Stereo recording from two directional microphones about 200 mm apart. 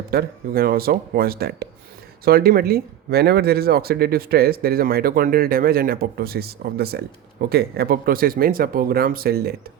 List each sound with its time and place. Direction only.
0.1 s speech: 50° right (ahead or behind)